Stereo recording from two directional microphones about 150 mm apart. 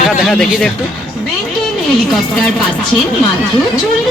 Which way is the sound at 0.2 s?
5° left (ahead or behind).